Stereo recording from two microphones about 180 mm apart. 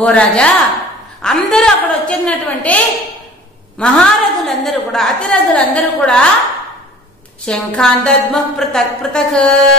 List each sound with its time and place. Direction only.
0.0 s a woman's voice: 5° left (ahead or behind)
7.4 s a woman's voice: 5° left (ahead or behind)